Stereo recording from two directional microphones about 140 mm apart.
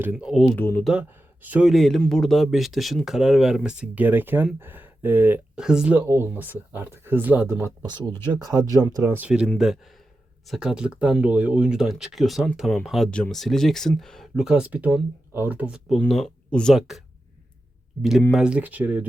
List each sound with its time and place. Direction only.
0.0 s speech: 15° right (ahead or behind)
0.3 s speech: centre (ahead or behind)
0.5 s speech: 15° left (ahead or behind)
0.9 s speech: 10° right (ahead or behind)
1.7 s speech: centre (ahead or behind)
6.1 s speech: 15° right (ahead or behind)
7.9 s speech: 30° right (ahead or behind); by 9.5 s 10° right (ahead or behind)
10.5 s speech: 5° right (ahead or behind)
18.3 s speech: 5° right (ahead or behind)